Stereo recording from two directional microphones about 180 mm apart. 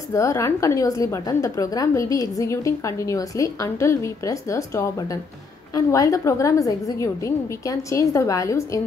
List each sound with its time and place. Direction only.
0.1 s a woman's voice: 15° left (ahead or behind)